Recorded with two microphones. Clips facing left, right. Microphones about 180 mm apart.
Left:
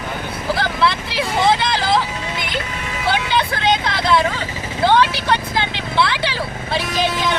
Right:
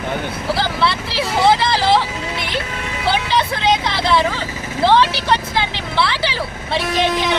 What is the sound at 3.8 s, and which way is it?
Speech, 25° right (ahead or behind).